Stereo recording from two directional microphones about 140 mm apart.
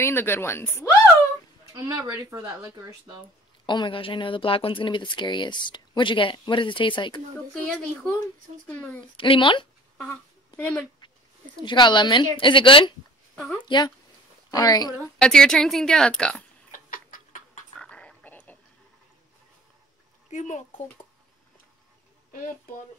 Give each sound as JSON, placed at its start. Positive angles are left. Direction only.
{"t": 0.0, "sound": "a woman's voice", "side_deg": 15}
{"t": 1.7, "sound": "speech", "side_deg": -20}
{"t": 3.6, "sound": "speech", "side_deg": 35}
{"t": 7.3, "sound": "a woman's voice", "side_deg": 5}
{"t": 9.0, "sound": "speech", "side_deg": 35}
{"t": 10.6, "sound": "a woman's voice", "side_deg": 5}
{"t": 11.6, "sound": "speech", "side_deg": 35}
{"t": 15.1, "sound": "a woman's voice", "side_deg": 5}
{"t": 16.7, "sound": "clock", "side_deg": 80}
{"t": 17.7, "sound": "a sound", "side_deg": 5}
{"t": 20.2, "sound": "speech", "side_deg": 55}